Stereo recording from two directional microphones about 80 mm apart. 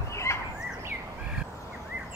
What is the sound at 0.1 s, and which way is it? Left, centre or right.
Turkey, left.